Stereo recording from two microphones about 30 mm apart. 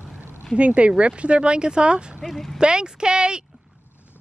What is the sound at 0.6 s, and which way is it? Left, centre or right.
Speech, right.